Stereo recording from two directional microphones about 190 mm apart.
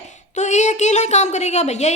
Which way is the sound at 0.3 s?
40° left (ahead or behind).